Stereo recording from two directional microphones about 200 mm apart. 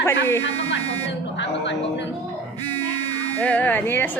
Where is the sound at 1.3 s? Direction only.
60° left (ahead or behind).